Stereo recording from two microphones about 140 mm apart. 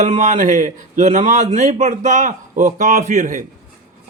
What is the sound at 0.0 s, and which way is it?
A man's voice, 60° right (ahead or behind).